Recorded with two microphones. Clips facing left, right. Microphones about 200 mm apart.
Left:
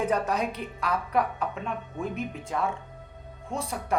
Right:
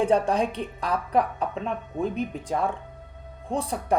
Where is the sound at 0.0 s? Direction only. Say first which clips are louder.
Right 5 dB; 30° right (ahead or behind).